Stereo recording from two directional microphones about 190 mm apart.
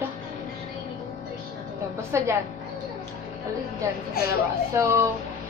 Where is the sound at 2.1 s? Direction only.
15° right (ahead or behind).